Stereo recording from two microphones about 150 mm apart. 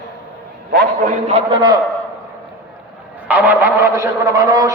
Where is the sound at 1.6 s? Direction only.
30° right (ahead or behind).